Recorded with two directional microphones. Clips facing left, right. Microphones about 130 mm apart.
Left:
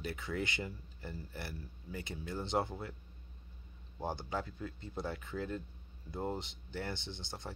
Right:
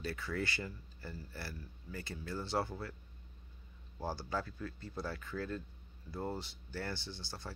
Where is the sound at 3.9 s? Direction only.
20° left (ahead or behind).